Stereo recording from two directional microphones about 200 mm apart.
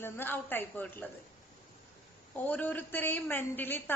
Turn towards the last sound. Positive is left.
turn(degrees=10)  # may be behind; listen again after turning